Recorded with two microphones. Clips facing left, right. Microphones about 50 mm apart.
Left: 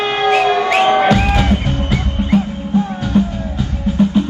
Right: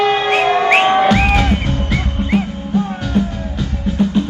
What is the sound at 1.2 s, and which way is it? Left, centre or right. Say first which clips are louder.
Music: right 1 dB; right.